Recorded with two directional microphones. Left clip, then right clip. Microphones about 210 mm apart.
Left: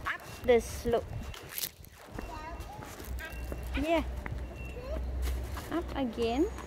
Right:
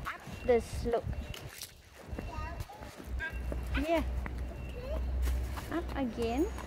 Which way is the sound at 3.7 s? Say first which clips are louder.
Left 2 dB; centre (ahead or behind).